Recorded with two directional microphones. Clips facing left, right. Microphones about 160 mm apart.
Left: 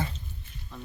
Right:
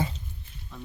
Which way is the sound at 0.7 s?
Centre (ahead or behind).